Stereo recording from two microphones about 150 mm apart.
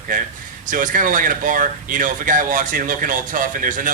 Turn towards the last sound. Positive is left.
turn(degrees=-65)  # may be behind; listen again after turning